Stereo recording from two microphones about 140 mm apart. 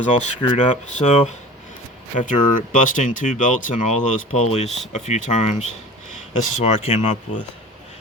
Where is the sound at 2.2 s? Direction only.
65° left (ahead or behind).